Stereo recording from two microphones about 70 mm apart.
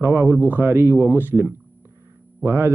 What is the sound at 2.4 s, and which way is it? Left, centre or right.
Speech, right.